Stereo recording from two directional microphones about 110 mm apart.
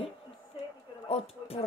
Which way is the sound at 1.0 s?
65° left (ahead or behind).